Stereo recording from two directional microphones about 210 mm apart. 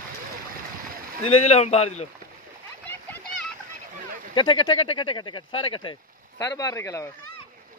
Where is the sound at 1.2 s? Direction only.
30° left (ahead or behind).